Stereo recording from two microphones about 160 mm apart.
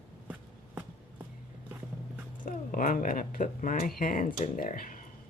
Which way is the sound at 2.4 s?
60° left (ahead or behind).